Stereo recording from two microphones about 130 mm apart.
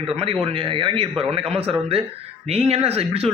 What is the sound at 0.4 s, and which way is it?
Speech, 45° right (ahead or behind).